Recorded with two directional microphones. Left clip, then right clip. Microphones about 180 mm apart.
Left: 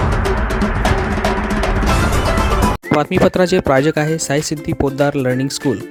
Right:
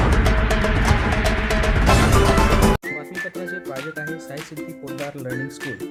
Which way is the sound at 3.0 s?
70° left (ahead or behind).